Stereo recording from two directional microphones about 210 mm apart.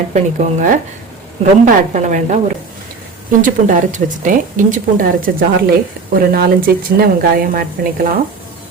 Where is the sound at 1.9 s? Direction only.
35° right (ahead or behind).